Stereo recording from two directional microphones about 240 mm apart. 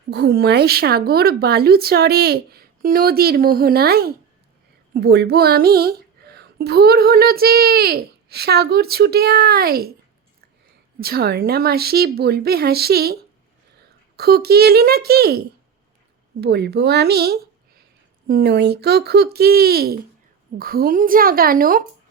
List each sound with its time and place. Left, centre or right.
0.1 s speech: right
11.0 s speech: right
14.2 s speech: right